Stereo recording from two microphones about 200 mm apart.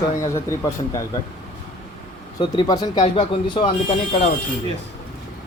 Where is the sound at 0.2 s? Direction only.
15° left (ahead or behind).